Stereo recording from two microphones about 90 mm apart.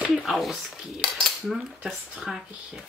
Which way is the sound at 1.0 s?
5° left (ahead or behind).